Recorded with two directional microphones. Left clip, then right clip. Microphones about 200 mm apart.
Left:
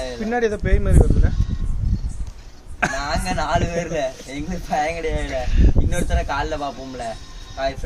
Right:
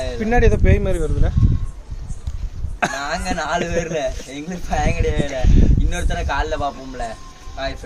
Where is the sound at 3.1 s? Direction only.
Centre (ahead or behind).